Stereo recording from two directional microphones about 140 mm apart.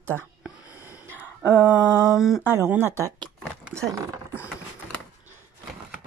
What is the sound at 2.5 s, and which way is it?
Speech, 15° right (ahead or behind).